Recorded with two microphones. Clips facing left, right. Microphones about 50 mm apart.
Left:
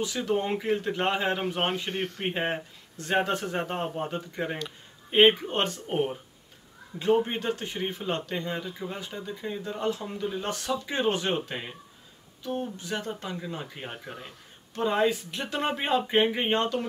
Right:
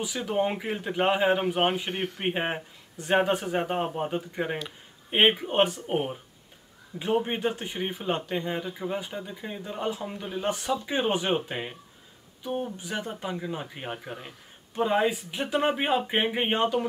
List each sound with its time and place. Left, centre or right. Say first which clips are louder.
0.0 s a man's voice: right 1 dB; centre
14.0 s a sound: right 2 dB; centre
14.8 s a man's voice: right 1 dB; centre